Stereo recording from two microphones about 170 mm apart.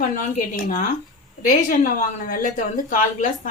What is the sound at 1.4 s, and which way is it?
A woman's voice, 50° left (ahead or behind).